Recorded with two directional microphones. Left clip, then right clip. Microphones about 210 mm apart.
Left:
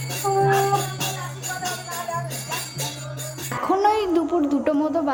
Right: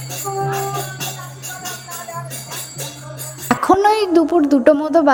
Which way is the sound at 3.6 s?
30° right (ahead or behind).